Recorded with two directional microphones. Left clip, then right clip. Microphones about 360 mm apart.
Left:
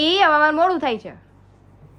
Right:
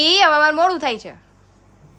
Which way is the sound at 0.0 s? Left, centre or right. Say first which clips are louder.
Right 2 dB; centre.